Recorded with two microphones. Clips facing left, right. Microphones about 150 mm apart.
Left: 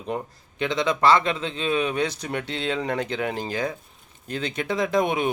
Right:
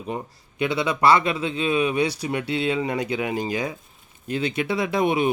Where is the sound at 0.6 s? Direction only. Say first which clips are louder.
Right 1 dB; 10° right (ahead or behind).